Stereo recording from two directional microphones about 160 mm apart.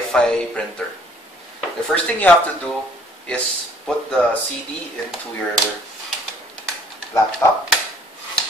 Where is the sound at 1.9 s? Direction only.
10° left (ahead or behind).